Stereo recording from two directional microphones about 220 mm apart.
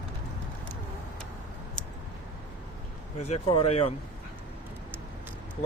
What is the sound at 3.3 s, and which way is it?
Speech, 25° left (ahead or behind).